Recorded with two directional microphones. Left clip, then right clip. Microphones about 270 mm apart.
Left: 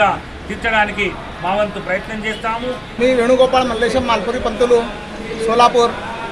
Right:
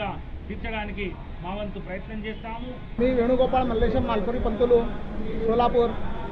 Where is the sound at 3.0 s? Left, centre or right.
Centre.